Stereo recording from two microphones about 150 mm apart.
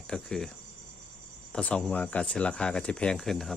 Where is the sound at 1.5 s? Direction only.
5° left (ahead or behind).